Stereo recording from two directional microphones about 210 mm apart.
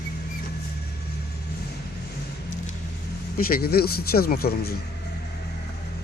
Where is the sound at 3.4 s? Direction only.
45° left (ahead or behind).